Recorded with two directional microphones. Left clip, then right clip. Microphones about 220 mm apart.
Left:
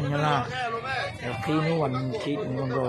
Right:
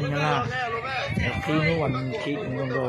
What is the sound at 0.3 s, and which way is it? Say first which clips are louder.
Speech: right 1 dB; 55° left (ahead or behind).